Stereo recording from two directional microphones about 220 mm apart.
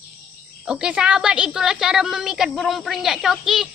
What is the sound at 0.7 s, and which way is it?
A woman's voice, 5° right (ahead or behind).